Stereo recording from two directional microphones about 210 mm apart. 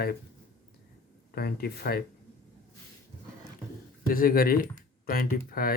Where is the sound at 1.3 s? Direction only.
45° left (ahead or behind).